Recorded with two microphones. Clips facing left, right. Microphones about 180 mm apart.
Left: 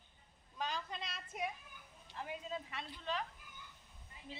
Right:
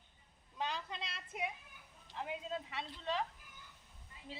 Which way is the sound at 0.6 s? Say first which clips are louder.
Right 1 dB; 20° right (ahead or behind).